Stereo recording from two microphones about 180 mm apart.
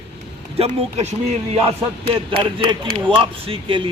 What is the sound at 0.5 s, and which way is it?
Speech, 35° right (ahead or behind).